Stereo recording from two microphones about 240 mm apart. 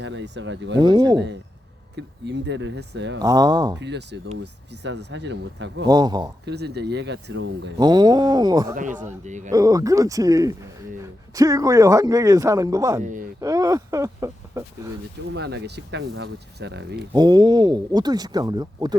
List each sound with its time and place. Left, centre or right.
0.0 s speech: right
0.8 s a man's voice: centre
2.0 s speech: right
3.2 s a man's voice: centre
3.8 s speech: right
5.9 s a man's voice: centre
6.4 s speech: right
7.8 s a man's voice: centre
8.7 s a man's voice: right
9.5 s a man's voice: centre
13.0 s a man's voice: right
13.4 s speech: centre
15.3 s speech: right
17.2 s a man's voice: centre